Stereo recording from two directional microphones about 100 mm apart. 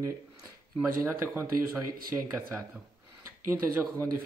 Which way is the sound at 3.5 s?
25° right (ahead or behind).